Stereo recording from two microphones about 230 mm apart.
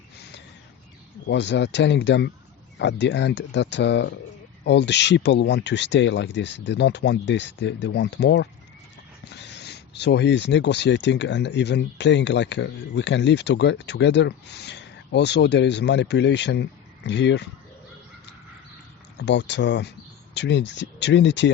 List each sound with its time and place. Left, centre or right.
1.3 s speech: left
19.1 s speech: left